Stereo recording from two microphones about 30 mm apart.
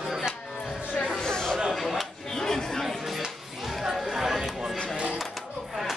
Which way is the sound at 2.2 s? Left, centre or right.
Centre.